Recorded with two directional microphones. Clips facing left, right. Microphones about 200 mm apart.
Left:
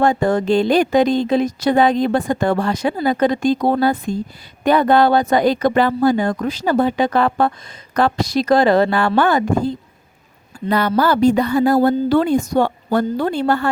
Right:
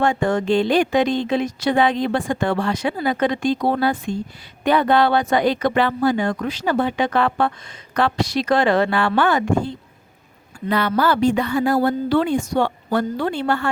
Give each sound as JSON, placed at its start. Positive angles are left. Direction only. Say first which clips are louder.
{"t": 0.0, "sound": "a woman's voice", "louder": "left 3 dB", "side_deg": 35}